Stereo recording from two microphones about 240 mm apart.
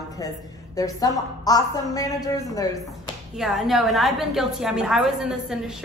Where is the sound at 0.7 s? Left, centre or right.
Centre.